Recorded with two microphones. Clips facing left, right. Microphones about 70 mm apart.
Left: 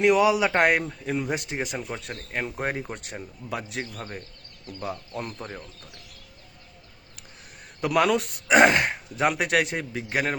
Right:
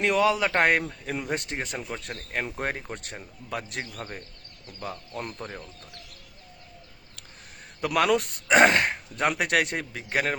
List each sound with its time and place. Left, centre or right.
0.0 s a man's voice: centre
7.8 s a man's voice: centre